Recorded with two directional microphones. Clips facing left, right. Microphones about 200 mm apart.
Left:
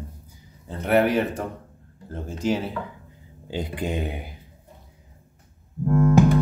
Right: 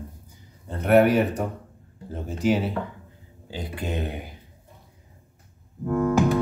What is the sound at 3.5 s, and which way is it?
Speech, 15° left (ahead or behind).